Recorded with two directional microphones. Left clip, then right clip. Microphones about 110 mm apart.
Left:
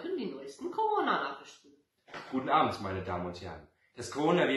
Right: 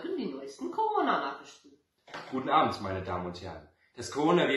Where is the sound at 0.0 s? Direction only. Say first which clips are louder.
Right 1 dB; 25° left (ahead or behind).